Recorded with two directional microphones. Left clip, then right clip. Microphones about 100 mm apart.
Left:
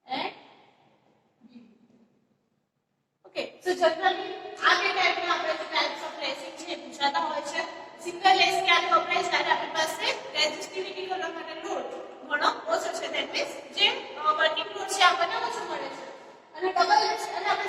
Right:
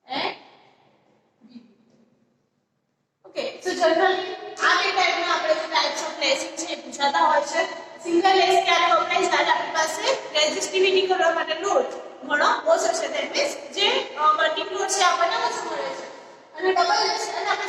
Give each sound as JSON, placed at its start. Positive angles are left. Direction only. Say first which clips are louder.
{"t": 0.1, "sound": "gasp", "louder": "right 5 dB", "side_deg": -30}
{"t": 3.3, "sound": "a woman's voice", "louder": "right 3 dB", "side_deg": -25}